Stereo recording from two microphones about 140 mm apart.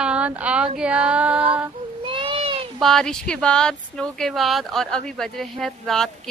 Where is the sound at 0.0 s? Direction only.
10° right (ahead or behind).